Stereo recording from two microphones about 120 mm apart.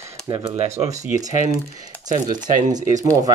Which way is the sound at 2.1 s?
90° right.